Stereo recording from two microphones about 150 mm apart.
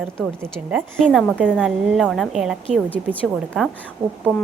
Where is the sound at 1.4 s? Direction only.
5° right (ahead or behind).